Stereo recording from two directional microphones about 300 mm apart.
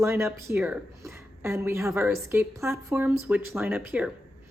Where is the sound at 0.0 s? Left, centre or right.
Centre.